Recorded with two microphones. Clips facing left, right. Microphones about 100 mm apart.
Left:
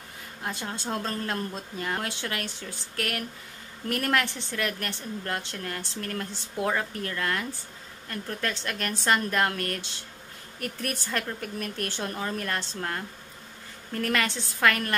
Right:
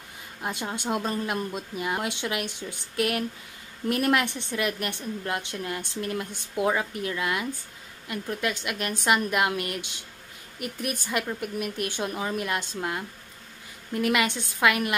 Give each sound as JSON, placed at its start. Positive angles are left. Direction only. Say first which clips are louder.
{"t": 0.4, "sound": "a woman's voice", "louder": "right 3 dB", "side_deg": -20}